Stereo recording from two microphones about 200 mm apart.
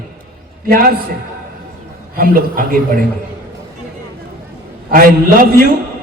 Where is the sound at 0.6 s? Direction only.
45° right (ahead or behind).